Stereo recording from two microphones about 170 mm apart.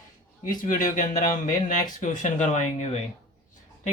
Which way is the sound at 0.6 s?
50° left (ahead or behind).